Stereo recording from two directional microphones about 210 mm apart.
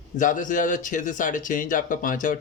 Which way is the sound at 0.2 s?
40° left (ahead or behind).